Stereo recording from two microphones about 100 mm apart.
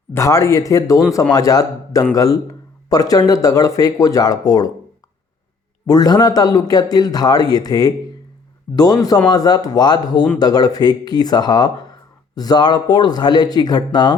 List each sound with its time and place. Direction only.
0.1 s speech: 30° left (ahead or behind)
5.8 s speech: 40° left (ahead or behind)